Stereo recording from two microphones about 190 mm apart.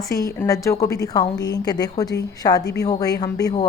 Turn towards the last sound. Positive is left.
turn(degrees=20)  # may be behind; listen again after turning